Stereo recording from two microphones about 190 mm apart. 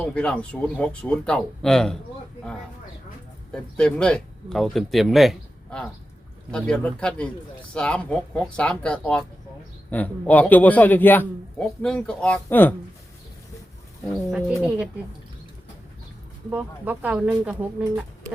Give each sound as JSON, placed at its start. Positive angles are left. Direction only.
{"t": 0.0, "sound": "speech", "side_deg": 5}
{"t": 3.5, "sound": "a man's voice", "side_deg": 5}
{"t": 14.0, "sound": "speech", "side_deg": 0}
{"t": 16.5, "sound": "speech", "side_deg": -10}